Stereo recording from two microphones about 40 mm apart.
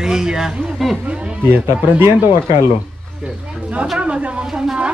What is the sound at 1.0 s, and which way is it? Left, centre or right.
Speech, right.